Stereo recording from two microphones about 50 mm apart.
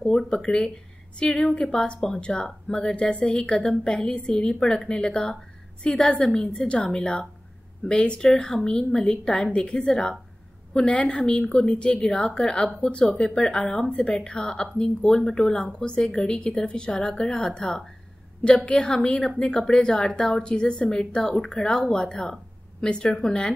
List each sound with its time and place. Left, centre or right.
0.0 s a woman's voice: centre